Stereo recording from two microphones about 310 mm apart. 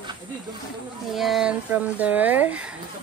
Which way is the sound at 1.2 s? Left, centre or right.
Centre.